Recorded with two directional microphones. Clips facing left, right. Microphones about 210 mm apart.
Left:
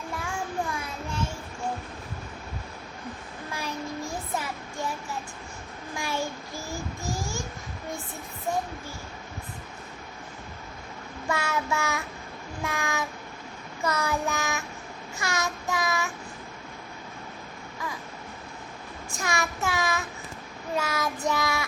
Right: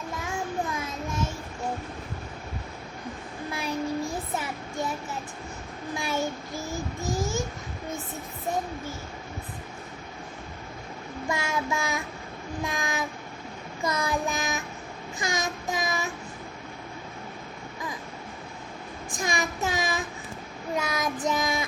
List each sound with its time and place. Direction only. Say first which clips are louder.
3.5 s child singing: right 5 dB; 15° right (ahead or behind)
6.0 s child singing: right 1 dB; 20° right (ahead or behind)
7.1 s babbling: right 5 dB; 20° right (ahead or behind)
11.3 s child singing: left 1 dB; 15° right (ahead or behind)
12.6 s train: left 1 dB; 15° right (ahead or behind)
13.8 s child singing: even; 15° right (ahead or behind)
19.1 s child singing: right 1 dB; 15° right (ahead or behind)